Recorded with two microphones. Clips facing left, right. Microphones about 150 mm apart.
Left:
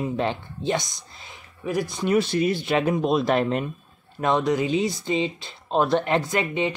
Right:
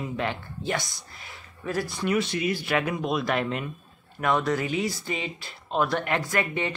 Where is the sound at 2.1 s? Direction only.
35° left (ahead or behind).